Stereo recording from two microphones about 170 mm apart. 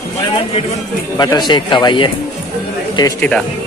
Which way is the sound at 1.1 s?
25° left (ahead or behind).